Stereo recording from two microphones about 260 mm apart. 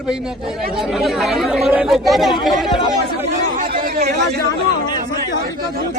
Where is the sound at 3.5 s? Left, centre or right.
Right.